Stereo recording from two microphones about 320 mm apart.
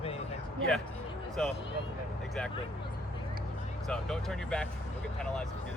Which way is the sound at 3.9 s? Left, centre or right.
Centre.